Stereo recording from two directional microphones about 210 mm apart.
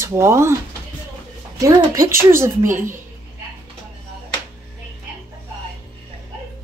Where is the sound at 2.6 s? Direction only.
40° right (ahead or behind).